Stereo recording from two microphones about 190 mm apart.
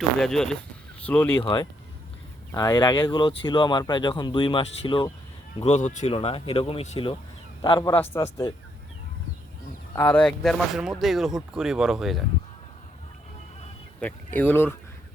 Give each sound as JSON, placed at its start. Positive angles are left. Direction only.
{"t": 0.2, "sound": "speech", "side_deg": 5}
{"t": 6.1, "sound": "speech", "side_deg": 30}
{"t": 8.1, "sound": "speech", "side_deg": 15}
{"t": 9.9, "sound": "speech", "side_deg": 10}
{"t": 14.0, "sound": "speech", "side_deg": 10}